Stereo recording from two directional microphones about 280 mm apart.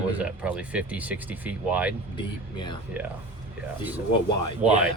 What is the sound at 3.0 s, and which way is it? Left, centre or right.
Speech, centre.